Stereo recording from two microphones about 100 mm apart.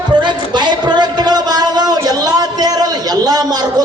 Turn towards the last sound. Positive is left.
turn(degrees=-40)  # may be behind; listen again after turning